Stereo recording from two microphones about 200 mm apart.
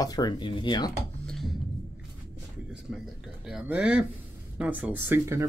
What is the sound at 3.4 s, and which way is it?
A man's voice, 5° right (ahead or behind).